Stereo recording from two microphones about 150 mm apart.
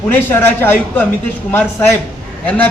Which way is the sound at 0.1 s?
15° left (ahead or behind).